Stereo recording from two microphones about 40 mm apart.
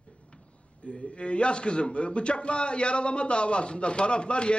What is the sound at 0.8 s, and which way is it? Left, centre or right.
A man's voice, left.